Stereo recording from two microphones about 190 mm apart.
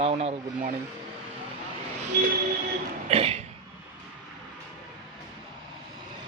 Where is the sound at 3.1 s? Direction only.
30° right (ahead or behind).